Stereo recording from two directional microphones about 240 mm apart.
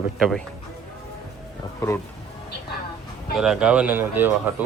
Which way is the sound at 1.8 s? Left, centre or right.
Centre.